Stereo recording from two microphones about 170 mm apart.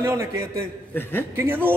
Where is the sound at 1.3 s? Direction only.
10° right (ahead or behind).